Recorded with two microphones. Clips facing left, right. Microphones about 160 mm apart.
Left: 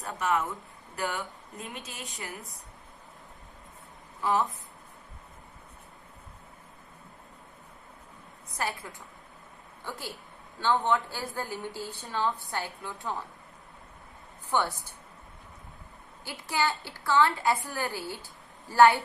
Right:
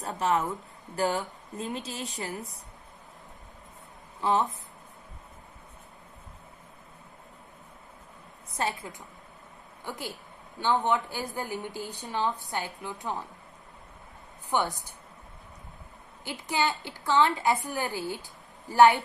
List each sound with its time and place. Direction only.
0.0 s speech: 35° right (ahead or behind)
4.2 s speech: 20° right (ahead or behind)
8.5 s a woman's voice: 20° right (ahead or behind)
14.5 s a woman's voice: 15° right (ahead or behind)
16.2 s a woman's voice: 20° right (ahead or behind)